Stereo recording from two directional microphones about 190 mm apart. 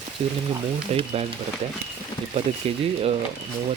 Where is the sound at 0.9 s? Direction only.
35° right (ahead or behind).